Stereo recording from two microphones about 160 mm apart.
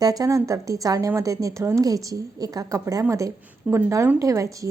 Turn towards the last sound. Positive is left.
turn(degrees=-20)  # may be behind; listen again after turning